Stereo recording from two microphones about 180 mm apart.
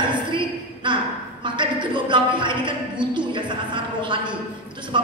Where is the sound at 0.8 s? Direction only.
25° right (ahead or behind).